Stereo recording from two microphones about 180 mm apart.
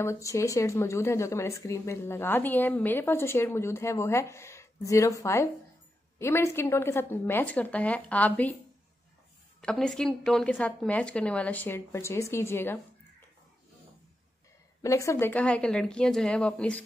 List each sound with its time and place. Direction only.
0.0 s speech: 15° left (ahead or behind)
9.6 s speech: 5° left (ahead or behind)
14.8 s speech: 15° left (ahead or behind)